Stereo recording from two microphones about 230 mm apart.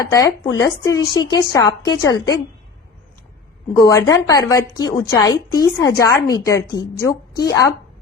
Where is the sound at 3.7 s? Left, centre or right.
Centre.